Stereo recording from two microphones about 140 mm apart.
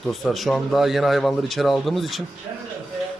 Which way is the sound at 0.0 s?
Centre (ahead or behind).